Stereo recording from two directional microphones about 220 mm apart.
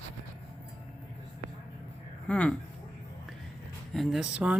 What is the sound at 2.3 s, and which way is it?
Speech, 5° left (ahead or behind).